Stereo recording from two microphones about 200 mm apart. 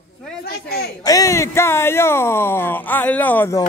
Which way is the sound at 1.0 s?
15° left (ahead or behind).